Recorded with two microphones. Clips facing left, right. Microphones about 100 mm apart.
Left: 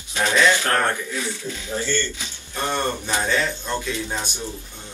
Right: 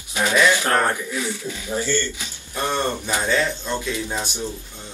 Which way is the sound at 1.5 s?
15° right (ahead or behind).